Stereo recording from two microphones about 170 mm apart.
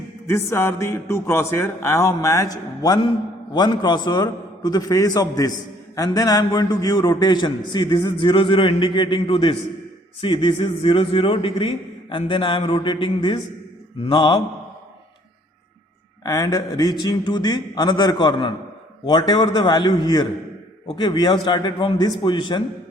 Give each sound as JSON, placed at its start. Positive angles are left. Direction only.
{"t": 0.3, "sound": "a man's voice", "side_deg": 15}
{"t": 16.2, "sound": "a man's voice", "side_deg": 20}